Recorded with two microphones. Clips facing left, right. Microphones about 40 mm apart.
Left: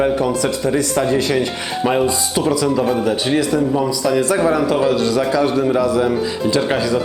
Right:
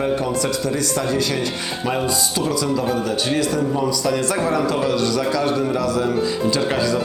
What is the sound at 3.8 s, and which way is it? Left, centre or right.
A man's voice, centre.